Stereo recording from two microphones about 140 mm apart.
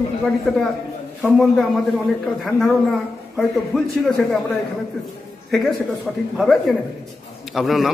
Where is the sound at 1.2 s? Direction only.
Centre (ahead or behind).